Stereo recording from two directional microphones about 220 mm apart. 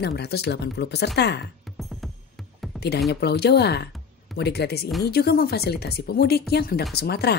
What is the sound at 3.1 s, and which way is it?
Speech, 50° left (ahead or behind).